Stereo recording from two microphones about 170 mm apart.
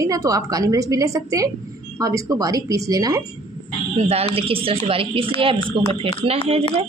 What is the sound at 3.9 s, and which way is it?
Speech, 35° right (ahead or behind).